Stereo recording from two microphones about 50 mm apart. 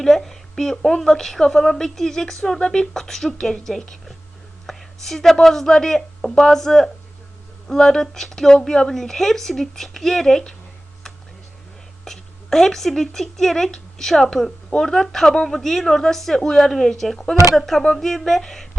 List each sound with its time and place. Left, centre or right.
0.0 s a woman's voice: centre
12.0 s a woman's voice: centre